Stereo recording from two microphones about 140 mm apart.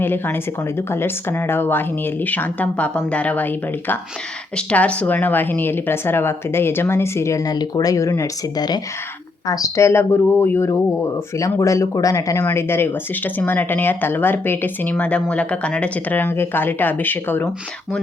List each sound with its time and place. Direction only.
0.0 s speech: 15° left (ahead or behind)